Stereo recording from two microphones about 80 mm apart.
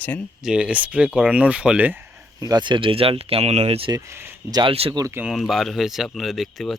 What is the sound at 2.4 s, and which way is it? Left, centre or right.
Speech, right.